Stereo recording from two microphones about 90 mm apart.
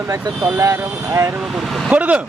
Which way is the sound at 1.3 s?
5° right (ahead or behind).